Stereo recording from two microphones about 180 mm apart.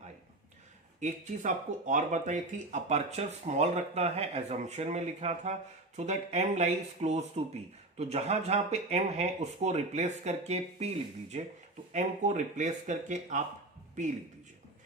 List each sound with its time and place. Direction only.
0.9 s speech: 45° right (ahead or behind)
11.9 s a man's voice: 40° right (ahead or behind)